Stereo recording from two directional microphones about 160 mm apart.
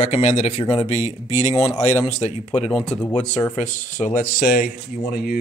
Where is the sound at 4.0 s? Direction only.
50° left (ahead or behind).